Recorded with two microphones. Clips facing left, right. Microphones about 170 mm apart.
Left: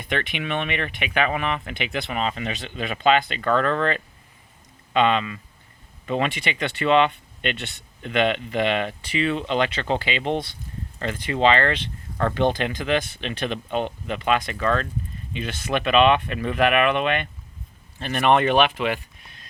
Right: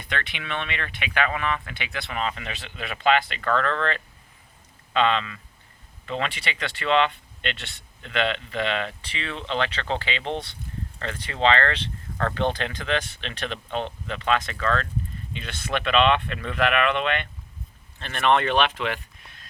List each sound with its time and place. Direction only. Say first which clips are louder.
0.1 s speech: left 5 dB; 20° left (ahead or behind)